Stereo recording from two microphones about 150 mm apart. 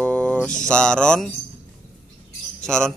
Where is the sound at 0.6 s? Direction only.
5° left (ahead or behind).